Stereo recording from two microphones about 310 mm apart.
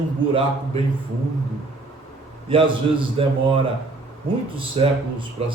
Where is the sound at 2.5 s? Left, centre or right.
Centre.